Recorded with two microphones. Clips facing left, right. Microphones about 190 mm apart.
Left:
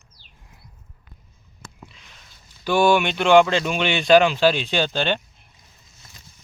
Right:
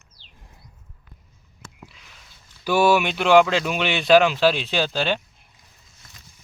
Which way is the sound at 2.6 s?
5° right (ahead or behind).